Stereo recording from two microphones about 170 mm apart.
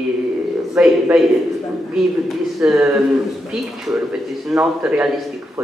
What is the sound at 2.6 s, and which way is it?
Speech, 5° right (ahead or behind).